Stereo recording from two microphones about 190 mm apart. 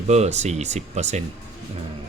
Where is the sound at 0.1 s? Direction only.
35° right (ahead or behind).